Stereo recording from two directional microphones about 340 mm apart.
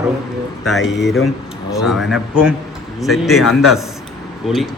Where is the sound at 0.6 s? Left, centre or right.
Centre.